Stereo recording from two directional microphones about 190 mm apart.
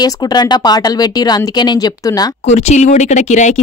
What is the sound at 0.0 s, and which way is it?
A woman's voice, 20° left (ahead or behind).